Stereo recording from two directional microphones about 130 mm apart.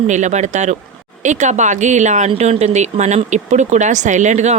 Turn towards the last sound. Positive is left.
turn(degrees=-65)  # may be behind; listen again after turning